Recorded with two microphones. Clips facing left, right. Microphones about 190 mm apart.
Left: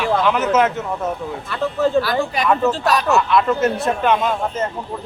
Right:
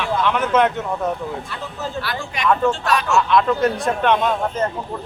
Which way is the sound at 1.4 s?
60° left (ahead or behind).